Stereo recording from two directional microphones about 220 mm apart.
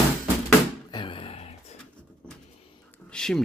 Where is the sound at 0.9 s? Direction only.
25° left (ahead or behind).